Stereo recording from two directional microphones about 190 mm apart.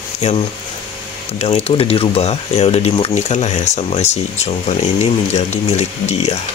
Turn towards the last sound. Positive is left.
turn(degrees=35)  # may be behind; listen again after turning